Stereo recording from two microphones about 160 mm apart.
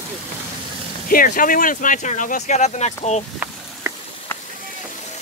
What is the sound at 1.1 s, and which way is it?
Speech, 60° left (ahead or behind).